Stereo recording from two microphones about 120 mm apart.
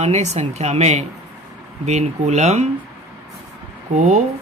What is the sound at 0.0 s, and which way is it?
Speech, 70° right (ahead or behind).